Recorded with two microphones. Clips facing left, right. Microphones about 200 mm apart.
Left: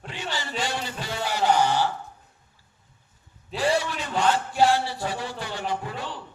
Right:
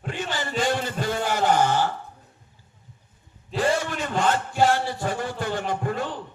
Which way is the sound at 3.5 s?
50° right (ahead or behind).